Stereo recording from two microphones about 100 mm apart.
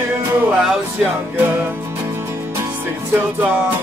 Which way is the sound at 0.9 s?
20° right (ahead or behind).